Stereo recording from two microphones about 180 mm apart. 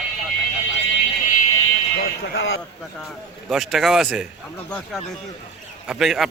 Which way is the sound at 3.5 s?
Centre (ahead or behind).